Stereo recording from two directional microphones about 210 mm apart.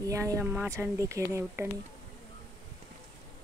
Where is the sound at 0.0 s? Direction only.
15° right (ahead or behind).